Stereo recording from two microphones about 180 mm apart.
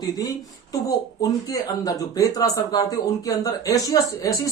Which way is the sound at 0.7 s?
20° left (ahead or behind).